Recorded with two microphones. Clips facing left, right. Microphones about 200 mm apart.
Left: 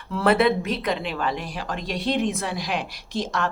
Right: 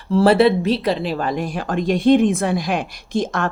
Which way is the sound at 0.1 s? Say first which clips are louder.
Right 6 dB; 30° right (ahead or behind).